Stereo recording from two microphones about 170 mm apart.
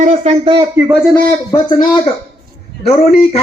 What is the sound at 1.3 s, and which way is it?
Speech, 20° left (ahead or behind).